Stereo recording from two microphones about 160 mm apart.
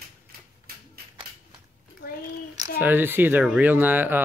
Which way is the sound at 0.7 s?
70° right (ahead or behind).